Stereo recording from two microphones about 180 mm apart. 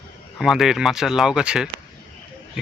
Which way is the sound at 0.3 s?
Centre (ahead or behind).